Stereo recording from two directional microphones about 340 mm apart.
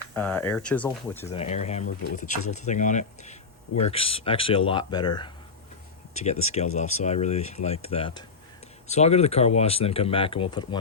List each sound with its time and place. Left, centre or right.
0.1 s speech: centre
1.4 s speech: centre